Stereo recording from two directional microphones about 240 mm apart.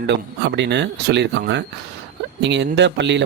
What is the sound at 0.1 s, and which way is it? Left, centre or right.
Speech, right.